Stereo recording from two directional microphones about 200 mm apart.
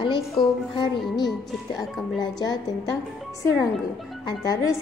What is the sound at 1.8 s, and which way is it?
Speech, 20° left (ahead or behind).